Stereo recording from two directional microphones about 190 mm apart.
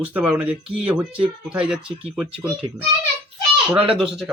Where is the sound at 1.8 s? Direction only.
30° right (ahead or behind).